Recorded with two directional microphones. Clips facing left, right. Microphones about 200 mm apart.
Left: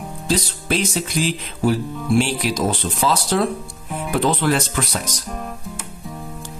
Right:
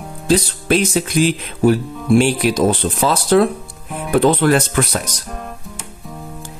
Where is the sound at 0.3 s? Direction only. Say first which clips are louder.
Right 6 dB; 55° right (ahead or behind).